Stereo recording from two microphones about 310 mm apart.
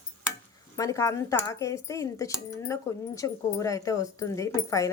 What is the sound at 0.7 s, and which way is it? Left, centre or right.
Speech, centre.